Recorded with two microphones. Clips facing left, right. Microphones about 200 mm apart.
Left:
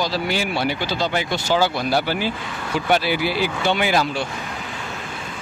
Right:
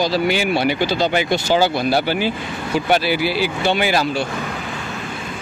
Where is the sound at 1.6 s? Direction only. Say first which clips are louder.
Right 1 dB; 10° right (ahead or behind).